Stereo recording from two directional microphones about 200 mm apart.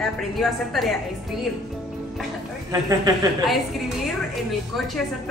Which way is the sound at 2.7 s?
20° right (ahead or behind).